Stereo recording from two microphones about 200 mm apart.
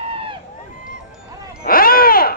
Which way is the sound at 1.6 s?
45° left (ahead or behind).